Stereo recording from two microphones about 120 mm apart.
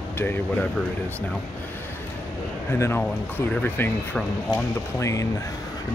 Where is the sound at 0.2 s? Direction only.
20° left (ahead or behind).